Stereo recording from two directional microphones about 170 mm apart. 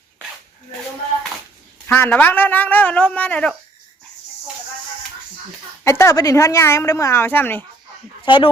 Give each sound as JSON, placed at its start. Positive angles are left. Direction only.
{"t": 1.9, "sound": "a woman's voice", "side_deg": 15}
{"t": 5.8, "sound": "a woman's voice", "side_deg": 20}
{"t": 8.2, "sound": "speech", "side_deg": 30}